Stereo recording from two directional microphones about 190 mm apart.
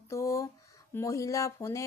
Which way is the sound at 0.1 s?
15° left (ahead or behind).